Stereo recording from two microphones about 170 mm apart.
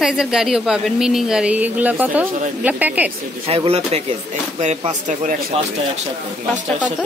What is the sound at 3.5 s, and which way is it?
Speech, 35° right (ahead or behind).